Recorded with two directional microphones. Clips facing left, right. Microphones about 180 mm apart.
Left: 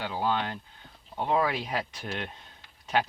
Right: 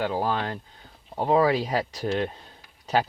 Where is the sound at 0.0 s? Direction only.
40° right (ahead or behind).